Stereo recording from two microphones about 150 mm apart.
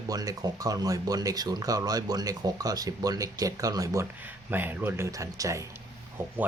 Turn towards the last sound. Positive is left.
turn(degrees=-20)  # may be behind; listen again after turning